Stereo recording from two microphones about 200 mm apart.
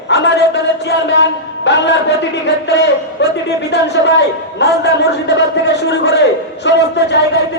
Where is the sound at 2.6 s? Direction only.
60° left (ahead or behind).